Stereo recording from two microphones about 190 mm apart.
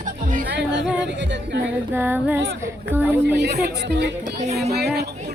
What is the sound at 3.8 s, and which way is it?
Speech, 65° right (ahead or behind).